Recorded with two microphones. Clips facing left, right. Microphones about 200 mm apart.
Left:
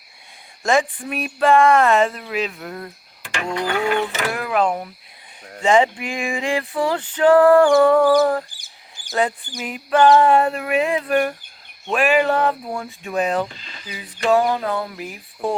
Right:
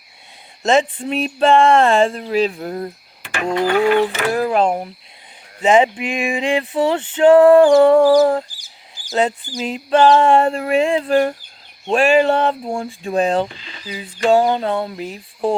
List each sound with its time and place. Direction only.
0.6 s speech: 25° right (ahead or behind)
5.6 s speech: 20° right (ahead or behind)